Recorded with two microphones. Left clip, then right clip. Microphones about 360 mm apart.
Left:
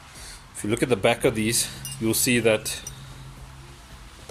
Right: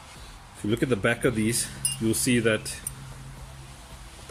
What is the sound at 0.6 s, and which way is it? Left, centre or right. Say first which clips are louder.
Speech: left 3 dB; centre.